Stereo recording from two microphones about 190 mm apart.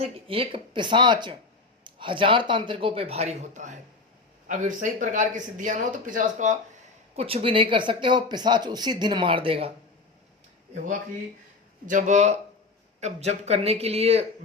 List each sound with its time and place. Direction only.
0.0 s speech: 30° right (ahead or behind)
7.2 s speech: 30° right (ahead or behind)
11.9 s speech: 40° right (ahead or behind)